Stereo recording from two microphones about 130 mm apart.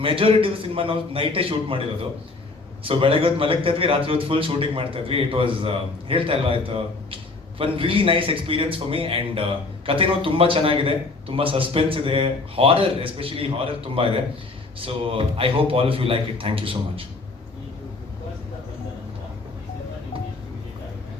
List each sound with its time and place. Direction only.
0.0 s a man's voice: 45° right (ahead or behind)